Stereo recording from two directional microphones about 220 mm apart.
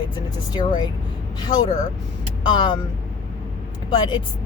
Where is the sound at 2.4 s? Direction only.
20° left (ahead or behind).